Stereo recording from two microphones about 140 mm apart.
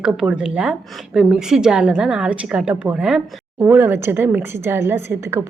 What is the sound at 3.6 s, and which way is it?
Speech, 15° right (ahead or behind).